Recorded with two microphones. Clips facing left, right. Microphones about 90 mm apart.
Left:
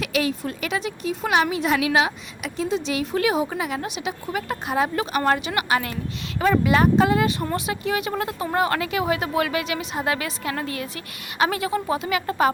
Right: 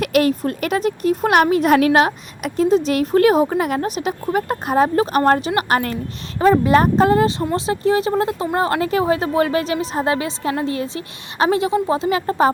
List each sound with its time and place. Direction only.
0.0 s speech: 50° right (ahead or behind)
6.4 s a woman's voice: 35° right (ahead or behind)